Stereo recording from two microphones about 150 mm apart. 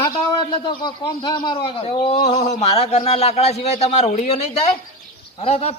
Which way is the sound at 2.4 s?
45° left (ahead or behind).